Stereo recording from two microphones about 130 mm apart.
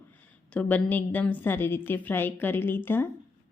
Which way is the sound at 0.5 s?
10° left (ahead or behind).